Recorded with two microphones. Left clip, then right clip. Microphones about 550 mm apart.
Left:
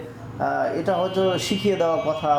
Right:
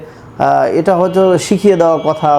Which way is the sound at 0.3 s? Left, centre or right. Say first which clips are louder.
Right 12 dB; right.